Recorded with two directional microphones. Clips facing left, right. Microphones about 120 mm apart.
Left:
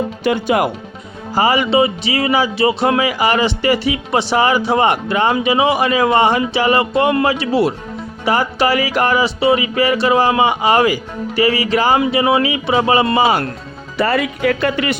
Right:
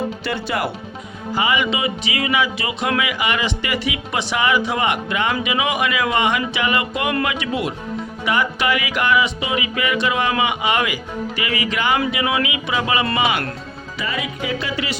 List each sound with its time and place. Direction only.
0.3 s speech: 45° left (ahead or behind)
1.3 s music: 35° left (ahead or behind)
14.0 s speech: 60° left (ahead or behind)